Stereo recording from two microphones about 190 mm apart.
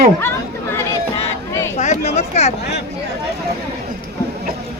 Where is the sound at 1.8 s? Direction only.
35° left (ahead or behind).